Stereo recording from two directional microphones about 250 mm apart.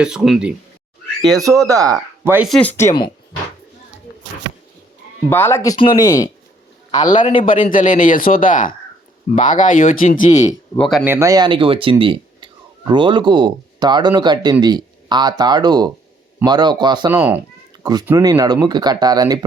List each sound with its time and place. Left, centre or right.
0.0 s speech: centre
2.8 s speech: centre
5.3 s speech: centre
7.4 s speech: left
10.8 s speech: centre
17.2 s speech: centre